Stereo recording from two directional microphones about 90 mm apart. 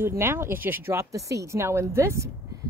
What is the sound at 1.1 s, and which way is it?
Speech, 35° right (ahead or behind).